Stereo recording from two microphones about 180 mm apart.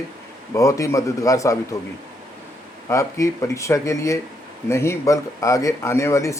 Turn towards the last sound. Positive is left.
turn(degrees=15)  # may be behind; listen again after turning